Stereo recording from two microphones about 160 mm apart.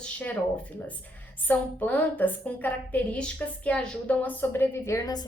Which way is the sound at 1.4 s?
10° left (ahead or behind).